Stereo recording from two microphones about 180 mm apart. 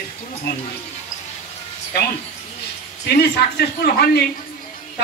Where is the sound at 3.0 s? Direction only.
60° left (ahead or behind).